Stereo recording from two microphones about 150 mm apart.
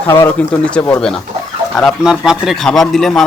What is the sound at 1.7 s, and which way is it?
Speech, centre (ahead or behind).